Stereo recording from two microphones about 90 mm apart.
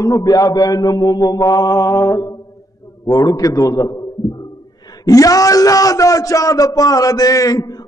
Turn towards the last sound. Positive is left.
turn(degrees=40)  # may be behind; listen again after turning